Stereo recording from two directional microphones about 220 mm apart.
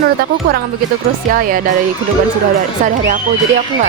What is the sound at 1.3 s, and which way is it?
Speech, 40° right (ahead or behind).